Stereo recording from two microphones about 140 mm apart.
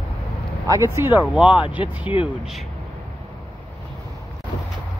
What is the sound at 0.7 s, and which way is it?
Speech, 20° right (ahead or behind).